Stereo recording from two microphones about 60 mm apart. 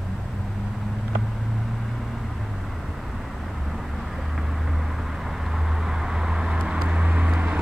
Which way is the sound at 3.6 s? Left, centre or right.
Centre.